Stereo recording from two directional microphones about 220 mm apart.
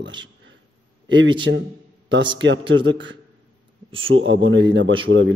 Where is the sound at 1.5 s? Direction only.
55° right (ahead or behind).